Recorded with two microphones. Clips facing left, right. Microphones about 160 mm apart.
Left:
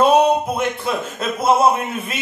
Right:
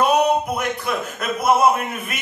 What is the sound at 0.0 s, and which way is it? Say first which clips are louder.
Speech: left 3 dB; 30° left (ahead or behind).